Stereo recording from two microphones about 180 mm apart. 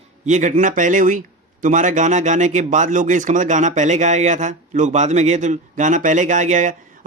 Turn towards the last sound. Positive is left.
turn(degrees=-45)  # may be behind; listen again after turning